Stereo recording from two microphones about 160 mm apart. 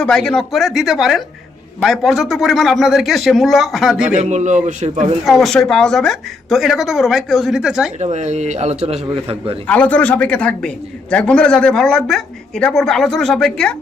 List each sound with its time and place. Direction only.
0.0 s a woman's voice: 5° left (ahead or behind)
4.2 s a man's voice: 50° right (ahead or behind)
5.2 s a woman's voice: centre (ahead or behind)
7.9 s a man's voice: 45° right (ahead or behind)
9.6 s a woman's voice: 10° left (ahead or behind)